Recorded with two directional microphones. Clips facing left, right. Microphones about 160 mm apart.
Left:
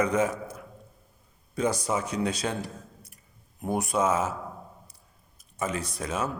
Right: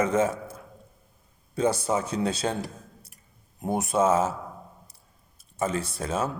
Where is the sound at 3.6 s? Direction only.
25° right (ahead or behind).